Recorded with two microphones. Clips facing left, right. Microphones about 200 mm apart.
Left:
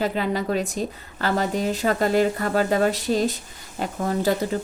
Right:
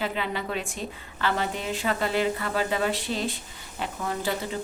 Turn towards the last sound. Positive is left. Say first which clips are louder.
# left 7 dB
turn(degrees=40)  # may be behind; listen again after turning